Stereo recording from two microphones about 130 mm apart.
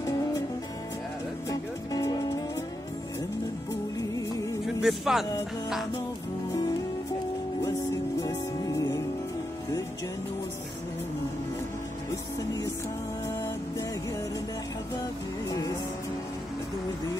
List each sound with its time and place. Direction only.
1.5 s music: 30° left (ahead or behind)
4.6 s speech: centre (ahead or behind)
8.2 s music: 30° left (ahead or behind)